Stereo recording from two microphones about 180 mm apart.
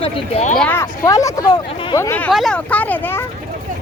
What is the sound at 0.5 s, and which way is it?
Speech, 10° left (ahead or behind).